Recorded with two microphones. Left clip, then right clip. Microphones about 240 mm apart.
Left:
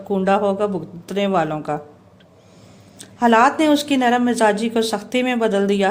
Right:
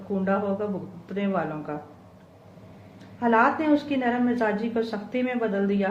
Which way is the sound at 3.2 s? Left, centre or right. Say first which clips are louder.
Left 7 dB; left.